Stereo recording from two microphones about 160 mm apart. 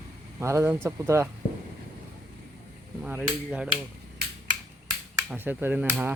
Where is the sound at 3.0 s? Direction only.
10° right (ahead or behind).